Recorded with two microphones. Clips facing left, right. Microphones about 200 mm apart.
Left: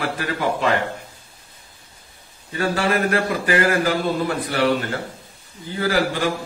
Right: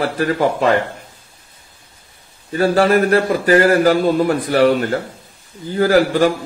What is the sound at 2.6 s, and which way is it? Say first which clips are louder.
A man's voice: right 7 dB; 40° right (ahead or behind).